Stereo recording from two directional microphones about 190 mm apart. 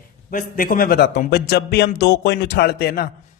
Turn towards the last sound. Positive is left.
turn(degrees=55)  # may be behind; listen again after turning